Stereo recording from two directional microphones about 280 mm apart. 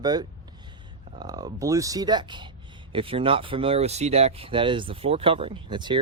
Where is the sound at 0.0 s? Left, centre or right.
Centre.